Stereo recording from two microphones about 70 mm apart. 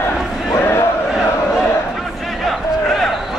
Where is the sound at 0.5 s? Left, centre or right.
Left.